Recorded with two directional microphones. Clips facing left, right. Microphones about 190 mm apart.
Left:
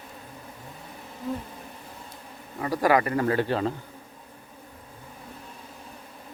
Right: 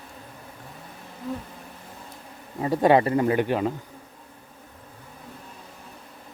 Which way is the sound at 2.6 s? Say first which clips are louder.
Right 4 dB; 25° right (ahead or behind).